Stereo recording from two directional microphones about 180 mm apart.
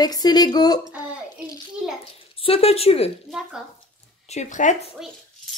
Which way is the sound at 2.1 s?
30° left (ahead or behind).